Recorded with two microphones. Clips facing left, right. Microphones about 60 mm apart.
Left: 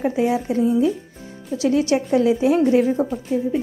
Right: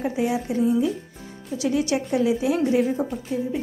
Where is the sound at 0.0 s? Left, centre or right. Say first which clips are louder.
Left 4 dB; left.